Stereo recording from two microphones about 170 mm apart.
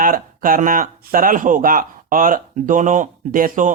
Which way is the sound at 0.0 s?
55° right (ahead or behind).